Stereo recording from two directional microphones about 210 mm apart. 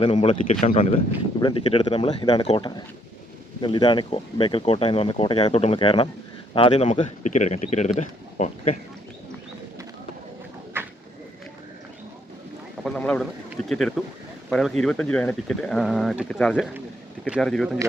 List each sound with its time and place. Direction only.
0.0 s speech: 25° left (ahead or behind)
10.8 s a sound: 10° right (ahead or behind)
12.8 s speech: 5° left (ahead or behind)